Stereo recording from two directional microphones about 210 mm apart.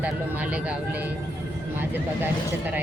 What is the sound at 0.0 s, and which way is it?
Speech, 5° right (ahead or behind).